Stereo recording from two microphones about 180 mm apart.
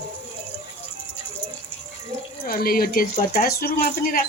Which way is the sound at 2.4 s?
55° left (ahead or behind).